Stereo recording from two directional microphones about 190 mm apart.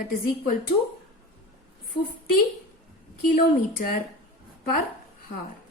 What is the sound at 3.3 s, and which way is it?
Speech, 50° left (ahead or behind).